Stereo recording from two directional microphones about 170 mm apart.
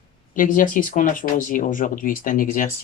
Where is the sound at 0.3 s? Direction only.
50° left (ahead or behind).